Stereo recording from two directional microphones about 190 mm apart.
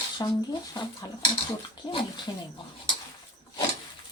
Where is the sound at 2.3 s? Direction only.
20° left (ahead or behind).